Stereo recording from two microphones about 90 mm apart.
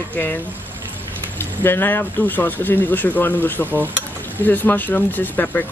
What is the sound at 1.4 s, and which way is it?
Speech, 25° left (ahead or behind).